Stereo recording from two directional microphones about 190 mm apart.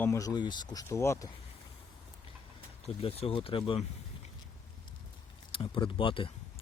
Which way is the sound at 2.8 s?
30° left (ahead or behind).